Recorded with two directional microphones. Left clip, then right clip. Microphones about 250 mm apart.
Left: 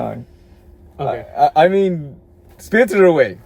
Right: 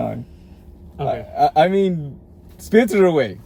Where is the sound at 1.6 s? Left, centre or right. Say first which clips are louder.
Left 3 dB; centre.